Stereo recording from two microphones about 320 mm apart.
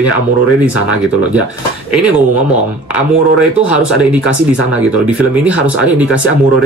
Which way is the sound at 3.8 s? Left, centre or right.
Centre.